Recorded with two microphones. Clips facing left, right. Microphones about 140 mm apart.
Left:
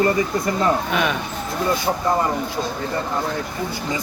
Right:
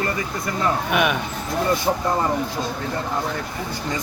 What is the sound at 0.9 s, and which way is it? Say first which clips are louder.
Speech: right 1 dB; 15° right (ahead or behind).